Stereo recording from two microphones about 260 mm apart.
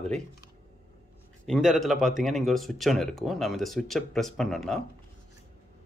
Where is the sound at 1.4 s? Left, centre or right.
Centre.